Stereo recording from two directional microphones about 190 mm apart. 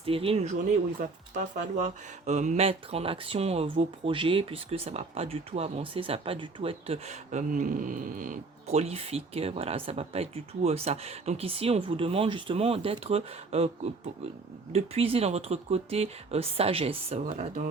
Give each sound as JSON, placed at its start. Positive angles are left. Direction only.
{"t": 0.0, "sound": "speech", "side_deg": -30}
{"t": 0.9, "sound": "speech", "side_deg": -40}
{"t": 14.7, "sound": "speech", "side_deg": -35}